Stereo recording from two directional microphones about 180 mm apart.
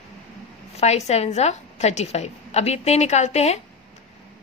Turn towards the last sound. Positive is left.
turn(degrees=35)  # may be behind; listen again after turning